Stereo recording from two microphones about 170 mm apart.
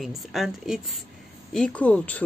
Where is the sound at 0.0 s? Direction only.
Centre (ahead or behind).